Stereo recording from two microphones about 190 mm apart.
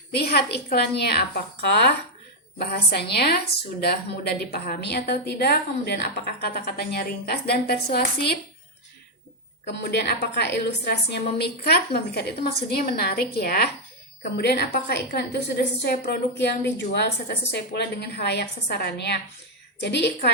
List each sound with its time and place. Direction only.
0.1 s a woman's voice: 55° left (ahead or behind)
9.8 s a woman's voice: 60° left (ahead or behind)